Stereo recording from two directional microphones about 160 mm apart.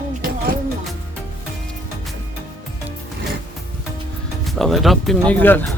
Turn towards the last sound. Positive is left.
turn(degrees=10)  # may be behind; listen again after turning